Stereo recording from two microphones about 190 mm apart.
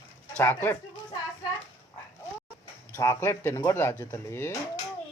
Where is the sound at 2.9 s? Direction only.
15° left (ahead or behind).